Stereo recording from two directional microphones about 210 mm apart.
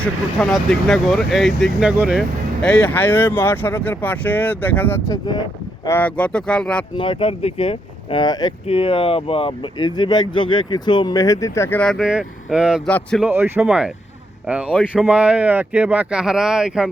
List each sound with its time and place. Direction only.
0.0 s speech: 5° left (ahead or behind)
6.9 s speech: 25° left (ahead or behind); by 13.2 s 5° left (ahead or behind)
13.2 s speech: 10° right (ahead or behind)